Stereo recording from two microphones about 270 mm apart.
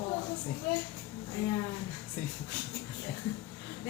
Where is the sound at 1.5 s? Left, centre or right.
Centre.